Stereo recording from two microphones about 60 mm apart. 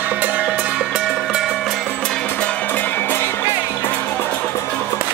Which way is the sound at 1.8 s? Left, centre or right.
Centre.